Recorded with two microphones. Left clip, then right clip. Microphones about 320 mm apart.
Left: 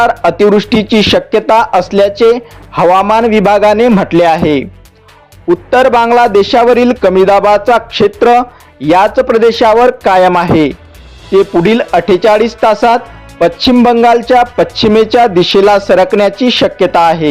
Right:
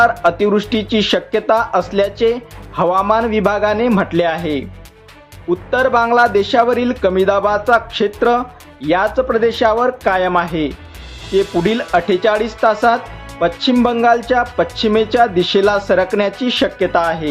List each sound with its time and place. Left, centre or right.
0.0 s speech: left
5.7 s speech: left